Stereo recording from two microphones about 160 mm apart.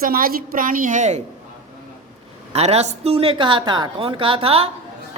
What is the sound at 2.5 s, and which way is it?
A woman's voice, 40° right (ahead or behind).